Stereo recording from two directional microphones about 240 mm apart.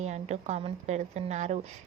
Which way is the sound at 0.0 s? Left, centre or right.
Right.